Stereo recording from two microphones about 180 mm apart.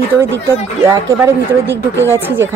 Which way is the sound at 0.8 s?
15° right (ahead or behind).